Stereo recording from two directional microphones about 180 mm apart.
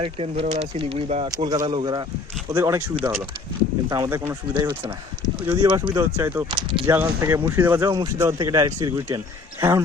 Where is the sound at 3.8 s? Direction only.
20° right (ahead or behind).